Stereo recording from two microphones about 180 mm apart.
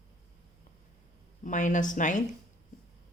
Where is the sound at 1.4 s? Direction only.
45° left (ahead or behind).